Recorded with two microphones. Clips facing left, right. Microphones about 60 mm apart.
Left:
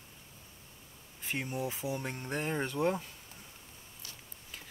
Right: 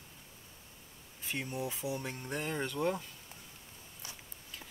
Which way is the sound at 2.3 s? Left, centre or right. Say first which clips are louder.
Left 2 dB; centre.